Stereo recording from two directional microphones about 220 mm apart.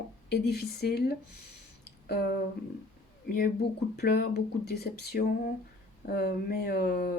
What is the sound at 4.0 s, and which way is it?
Speech, 45° left (ahead or behind).